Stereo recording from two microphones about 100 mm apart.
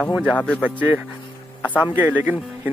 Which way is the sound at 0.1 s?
15° right (ahead or behind).